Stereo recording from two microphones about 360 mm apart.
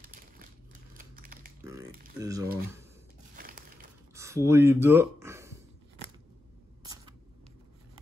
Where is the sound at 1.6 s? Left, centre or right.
Centre.